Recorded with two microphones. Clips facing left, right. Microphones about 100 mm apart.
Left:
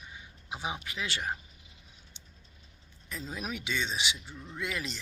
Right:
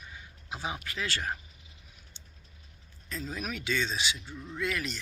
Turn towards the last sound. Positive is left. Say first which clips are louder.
# right 3 dB
turn(degrees=20)  # may be behind; listen again after turning